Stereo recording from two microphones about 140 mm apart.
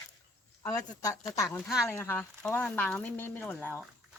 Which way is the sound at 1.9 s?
15° left (ahead or behind).